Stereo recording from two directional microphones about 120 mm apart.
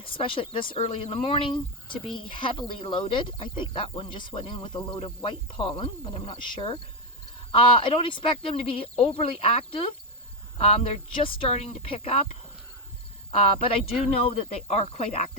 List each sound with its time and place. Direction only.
0.0 s speech: 45° left (ahead or behind); by 15.3 s 65° left (ahead or behind)